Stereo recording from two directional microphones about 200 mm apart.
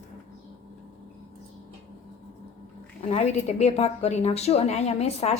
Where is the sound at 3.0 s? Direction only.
30° left (ahead or behind).